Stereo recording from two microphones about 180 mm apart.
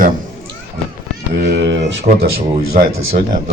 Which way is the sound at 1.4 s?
70° right (ahead or behind).